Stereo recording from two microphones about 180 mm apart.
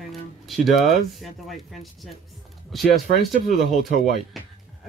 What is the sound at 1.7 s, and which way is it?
Speech, centre (ahead or behind).